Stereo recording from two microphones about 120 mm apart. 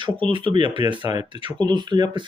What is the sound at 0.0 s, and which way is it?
Speech, 45° right (ahead or behind).